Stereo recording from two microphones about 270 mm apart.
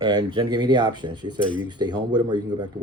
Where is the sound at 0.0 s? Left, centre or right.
Centre.